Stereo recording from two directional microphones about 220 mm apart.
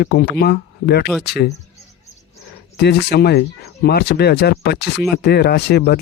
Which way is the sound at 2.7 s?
50° left (ahead or behind).